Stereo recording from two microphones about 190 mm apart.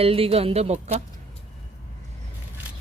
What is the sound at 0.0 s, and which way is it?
Speech, 30° right (ahead or behind).